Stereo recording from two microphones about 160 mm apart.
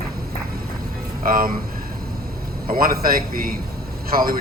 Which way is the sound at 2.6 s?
65° right (ahead or behind).